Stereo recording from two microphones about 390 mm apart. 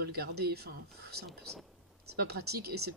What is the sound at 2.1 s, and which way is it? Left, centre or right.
Speech, right.